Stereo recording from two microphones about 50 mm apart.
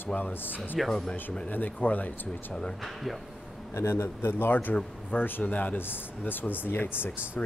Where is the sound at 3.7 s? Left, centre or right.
Left.